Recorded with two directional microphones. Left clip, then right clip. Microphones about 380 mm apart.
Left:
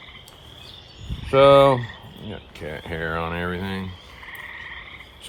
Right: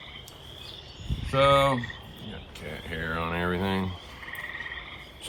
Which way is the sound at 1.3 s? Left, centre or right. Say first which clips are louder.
Left 8 dB; left.